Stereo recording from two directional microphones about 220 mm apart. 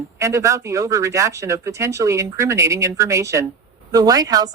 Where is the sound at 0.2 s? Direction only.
15° right (ahead or behind).